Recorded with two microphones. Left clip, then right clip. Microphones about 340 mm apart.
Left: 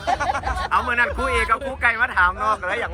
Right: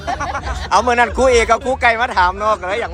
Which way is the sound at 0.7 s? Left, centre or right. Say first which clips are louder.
Right 7 dB; centre.